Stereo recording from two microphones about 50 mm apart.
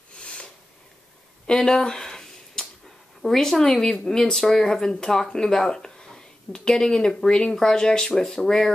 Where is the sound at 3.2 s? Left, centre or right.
Centre.